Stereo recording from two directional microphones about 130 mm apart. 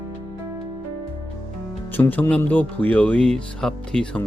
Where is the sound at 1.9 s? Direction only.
15° left (ahead or behind).